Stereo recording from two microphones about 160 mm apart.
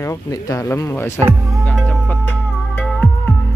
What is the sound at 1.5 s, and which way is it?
Music, 5° left (ahead or behind).